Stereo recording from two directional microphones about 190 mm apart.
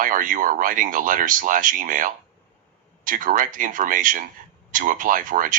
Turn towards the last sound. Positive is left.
turn(degrees=-45)  # may be behind; listen again after turning